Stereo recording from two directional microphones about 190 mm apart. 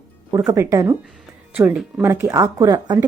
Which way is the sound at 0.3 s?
15° right (ahead or behind).